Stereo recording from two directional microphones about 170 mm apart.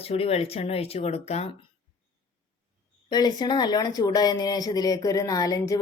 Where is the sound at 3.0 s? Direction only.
25° left (ahead or behind).